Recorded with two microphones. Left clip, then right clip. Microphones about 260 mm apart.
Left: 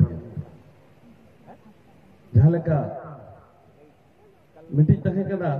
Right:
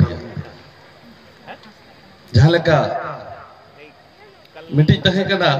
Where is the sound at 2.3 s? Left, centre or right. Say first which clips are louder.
Right 9 dB; right.